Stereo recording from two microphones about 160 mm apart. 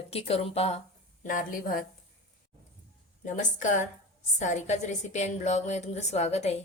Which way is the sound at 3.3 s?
50° left (ahead or behind).